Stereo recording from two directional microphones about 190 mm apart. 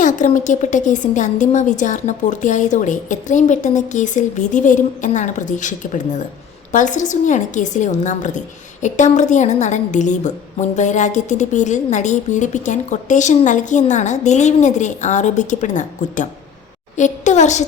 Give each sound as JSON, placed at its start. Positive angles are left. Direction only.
{"t": 0.0, "sound": "a woman's voice", "side_deg": 40}